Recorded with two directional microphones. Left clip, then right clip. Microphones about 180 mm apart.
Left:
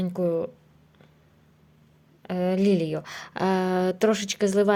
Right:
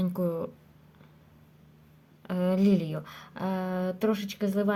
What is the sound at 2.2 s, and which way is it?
Speech, 15° left (ahead or behind).